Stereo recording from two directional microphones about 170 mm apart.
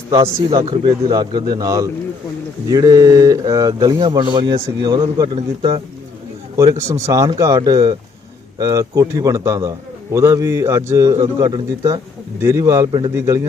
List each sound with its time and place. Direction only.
0.1 s a man's voice: 25° right (ahead or behind)
6.7 s a man's voice: 15° right (ahead or behind)